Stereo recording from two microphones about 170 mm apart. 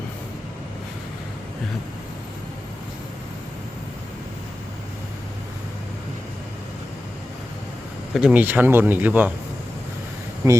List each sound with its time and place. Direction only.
8.1 s speech: 5° right (ahead or behind)
10.4 s speech: 15° right (ahead or behind)